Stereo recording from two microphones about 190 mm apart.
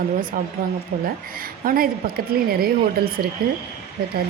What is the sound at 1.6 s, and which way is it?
A woman's voice, 50° right (ahead or behind).